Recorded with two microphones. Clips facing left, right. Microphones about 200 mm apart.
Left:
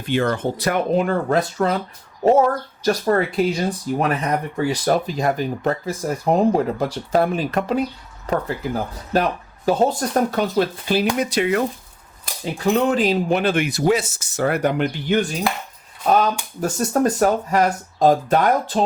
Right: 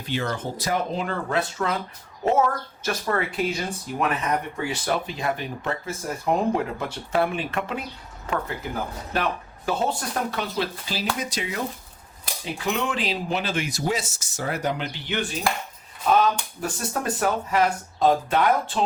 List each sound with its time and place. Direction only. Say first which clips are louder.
0.0 s speech: left 7 dB; 55° left (ahead or behind)
12.5 s speech: left 9 dB; 40° left (ahead or behind)